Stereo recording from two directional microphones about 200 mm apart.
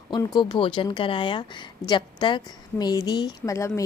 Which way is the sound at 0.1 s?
20° left (ahead or behind).